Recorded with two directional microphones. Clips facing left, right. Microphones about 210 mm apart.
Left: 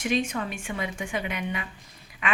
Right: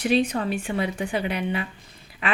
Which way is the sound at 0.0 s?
35° right (ahead or behind).